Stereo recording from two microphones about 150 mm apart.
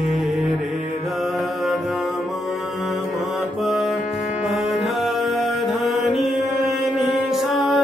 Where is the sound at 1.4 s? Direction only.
Centre (ahead or behind).